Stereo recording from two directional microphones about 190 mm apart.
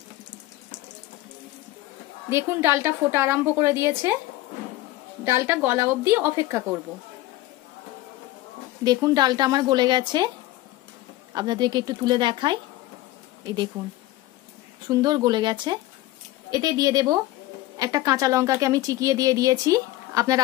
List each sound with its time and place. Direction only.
2.2 s speech: 15° right (ahead or behind)
5.2 s speech: 15° right (ahead or behind)
8.8 s a woman's voice: 20° right (ahead or behind)
11.3 s a woman's voice: 20° right (ahead or behind)
13.7 s a woman's voice: 25° right (ahead or behind)